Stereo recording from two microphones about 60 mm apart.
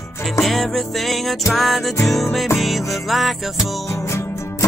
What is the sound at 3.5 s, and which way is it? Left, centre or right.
Music, left.